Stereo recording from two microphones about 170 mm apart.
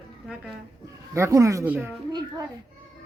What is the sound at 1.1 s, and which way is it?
Speech, 15° right (ahead or behind).